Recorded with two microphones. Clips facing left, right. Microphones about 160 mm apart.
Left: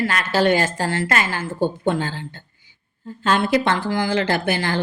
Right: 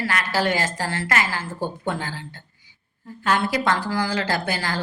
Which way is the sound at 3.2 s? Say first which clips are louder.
Left 3 dB; 25° left (ahead or behind).